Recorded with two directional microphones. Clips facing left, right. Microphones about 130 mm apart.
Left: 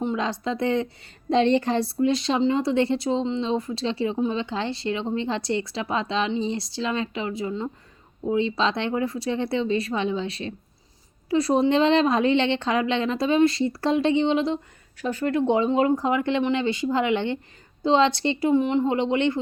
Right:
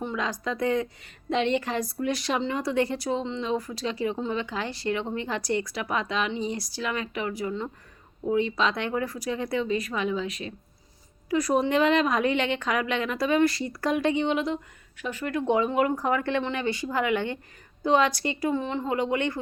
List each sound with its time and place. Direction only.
0.0 s a woman's voice: 25° left (ahead or behind)